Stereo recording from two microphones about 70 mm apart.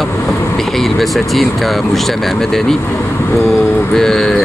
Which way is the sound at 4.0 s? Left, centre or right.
Centre.